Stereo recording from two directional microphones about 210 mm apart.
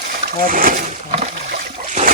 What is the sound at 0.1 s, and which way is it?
Speech, 45° right (ahead or behind).